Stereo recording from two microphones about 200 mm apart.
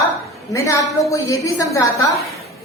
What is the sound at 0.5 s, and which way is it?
A woman's voice, 15° left (ahead or behind).